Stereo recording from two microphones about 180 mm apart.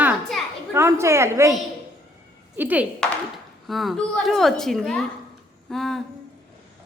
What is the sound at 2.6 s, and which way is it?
A woman's voice, 10° right (ahead or behind).